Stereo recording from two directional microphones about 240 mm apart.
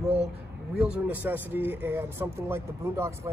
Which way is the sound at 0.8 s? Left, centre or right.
Centre.